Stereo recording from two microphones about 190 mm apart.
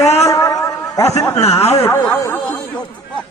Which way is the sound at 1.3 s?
35° left (ahead or behind).